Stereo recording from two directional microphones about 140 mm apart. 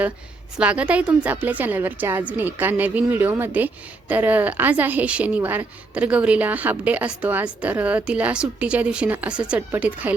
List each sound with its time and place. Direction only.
0.6 s a woman's voice: 10° right (ahead or behind)